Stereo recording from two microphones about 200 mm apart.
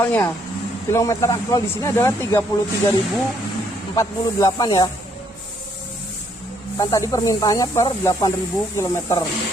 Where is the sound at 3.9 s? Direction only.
15° left (ahead or behind).